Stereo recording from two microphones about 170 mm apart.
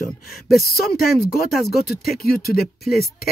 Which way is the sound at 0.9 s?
65° left (ahead or behind).